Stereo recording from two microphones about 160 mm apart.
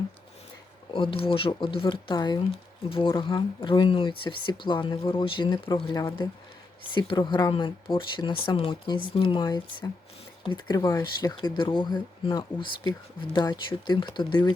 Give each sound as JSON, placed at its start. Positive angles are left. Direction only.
{"t": 0.9, "sound": "speech", "side_deg": 35}